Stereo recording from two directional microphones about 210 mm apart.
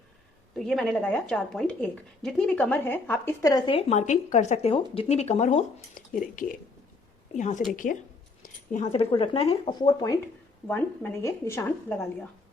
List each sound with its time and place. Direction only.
0.5 s a woman's voice: centre (ahead or behind); by 3.8 s 15° left (ahead or behind)
3.8 s a woman's voice: 30° left (ahead or behind); by 12.0 s 10° left (ahead or behind)